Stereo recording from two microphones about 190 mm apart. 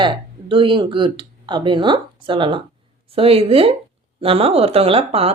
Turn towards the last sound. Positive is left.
turn(degrees=-30)  # may be behind; listen again after turning